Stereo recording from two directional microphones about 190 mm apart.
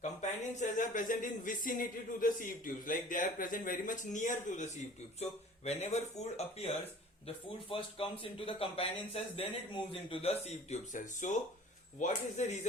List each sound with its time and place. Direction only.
0.0 s speech: 40° left (ahead or behind)